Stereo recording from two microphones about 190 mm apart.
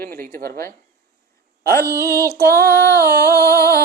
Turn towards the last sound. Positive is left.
turn(degrees=15)  # may be behind; listen again after turning